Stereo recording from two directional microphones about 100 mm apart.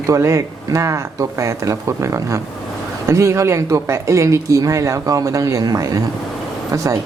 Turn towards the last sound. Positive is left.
turn(degrees=-35)  # may be behind; listen again after turning